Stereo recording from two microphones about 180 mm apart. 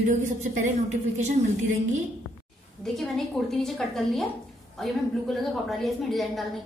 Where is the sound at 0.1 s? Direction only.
45° right (ahead or behind).